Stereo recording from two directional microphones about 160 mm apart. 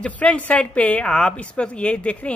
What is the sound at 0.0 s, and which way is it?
A woman's voice, 5° left (ahead or behind).